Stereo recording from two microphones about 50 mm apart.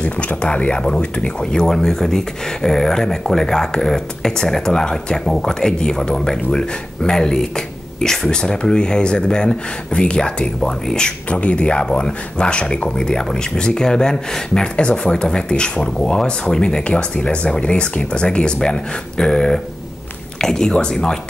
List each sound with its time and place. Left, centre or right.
0.0 s speech: left